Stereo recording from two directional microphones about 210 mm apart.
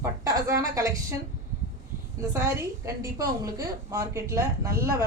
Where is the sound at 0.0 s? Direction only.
15° right (ahead or behind).